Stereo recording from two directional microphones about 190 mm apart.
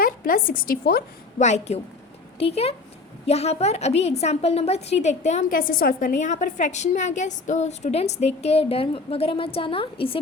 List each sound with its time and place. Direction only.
0.0 s a woman's voice: 45° left (ahead or behind)
1.4 s a woman's voice: 40° left (ahead or behind)